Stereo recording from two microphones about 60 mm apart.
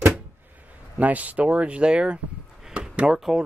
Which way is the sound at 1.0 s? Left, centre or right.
Right.